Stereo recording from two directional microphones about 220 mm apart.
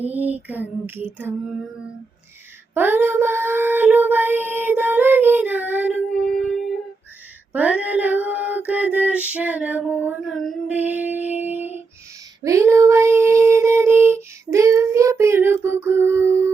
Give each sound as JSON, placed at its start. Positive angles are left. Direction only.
{"t": 0.0, "sound": "female singing", "side_deg": -5}
{"t": 2.7, "sound": "child singing", "side_deg": -10}
{"t": 7.5, "sound": "female singing", "side_deg": -5}
{"t": 11.3, "sound": "a sound", "side_deg": -10}
{"t": 12.4, "sound": "female singing", "side_deg": -15}